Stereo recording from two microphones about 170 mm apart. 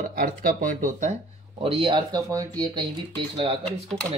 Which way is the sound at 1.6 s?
30° right (ahead or behind).